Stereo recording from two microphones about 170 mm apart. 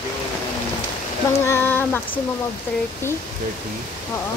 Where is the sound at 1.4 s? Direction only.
15° left (ahead or behind).